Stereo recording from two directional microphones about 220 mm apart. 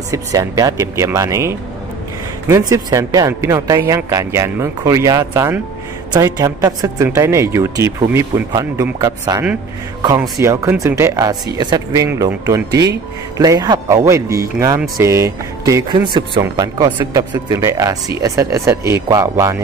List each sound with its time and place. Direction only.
0.1 s speech: 15° right (ahead or behind)
2.7 s speech: 15° right (ahead or behind)